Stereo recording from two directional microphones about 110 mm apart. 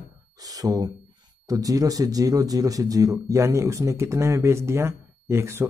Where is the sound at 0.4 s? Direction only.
35° right (ahead or behind).